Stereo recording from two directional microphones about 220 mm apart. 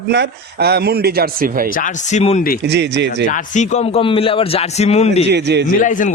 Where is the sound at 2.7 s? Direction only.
50° right (ahead or behind).